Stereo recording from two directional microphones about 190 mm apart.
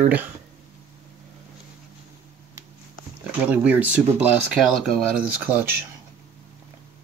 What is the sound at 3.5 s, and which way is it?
Speech, 10° right (ahead or behind).